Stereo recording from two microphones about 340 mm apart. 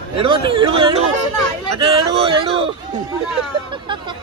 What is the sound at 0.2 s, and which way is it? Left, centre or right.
Speech, centre.